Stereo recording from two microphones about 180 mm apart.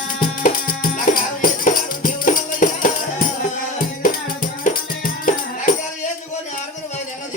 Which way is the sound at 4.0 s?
50° left (ahead or behind).